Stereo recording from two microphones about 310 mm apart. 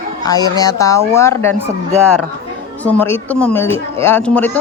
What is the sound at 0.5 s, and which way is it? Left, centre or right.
Speech, centre.